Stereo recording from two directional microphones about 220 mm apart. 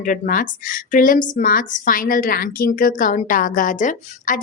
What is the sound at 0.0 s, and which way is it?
A woman's voice, 40° left (ahead or behind).